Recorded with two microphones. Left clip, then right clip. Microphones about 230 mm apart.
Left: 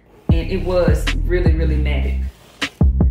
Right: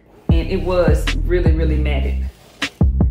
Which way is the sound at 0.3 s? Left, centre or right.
Centre.